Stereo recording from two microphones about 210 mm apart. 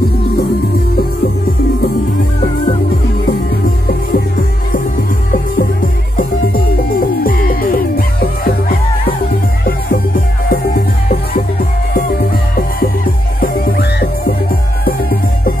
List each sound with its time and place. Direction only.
2.4 s music: 30° left (ahead or behind)
3.3 s music: 45° left (ahead or behind)
5.3 s music: 40° left (ahead or behind)
10.5 s music: 40° left (ahead or behind)